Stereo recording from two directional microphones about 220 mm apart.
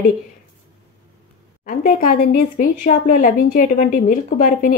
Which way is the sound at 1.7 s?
40° left (ahead or behind).